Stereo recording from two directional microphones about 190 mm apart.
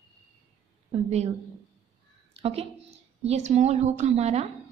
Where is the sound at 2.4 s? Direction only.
30° right (ahead or behind).